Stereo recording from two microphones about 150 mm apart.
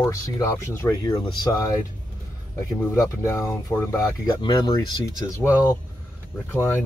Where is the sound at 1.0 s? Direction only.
30° left (ahead or behind).